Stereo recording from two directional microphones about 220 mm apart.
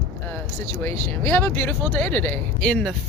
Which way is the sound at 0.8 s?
10° left (ahead or behind).